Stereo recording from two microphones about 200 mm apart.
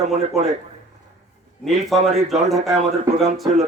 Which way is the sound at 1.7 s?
Centre (ahead or behind).